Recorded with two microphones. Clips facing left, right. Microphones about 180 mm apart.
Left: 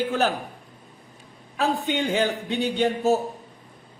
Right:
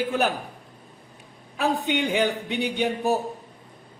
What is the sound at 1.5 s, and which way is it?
A man's voice, 15° right (ahead or behind).